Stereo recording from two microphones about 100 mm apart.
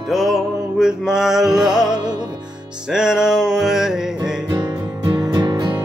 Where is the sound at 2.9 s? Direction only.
5° right (ahead or behind).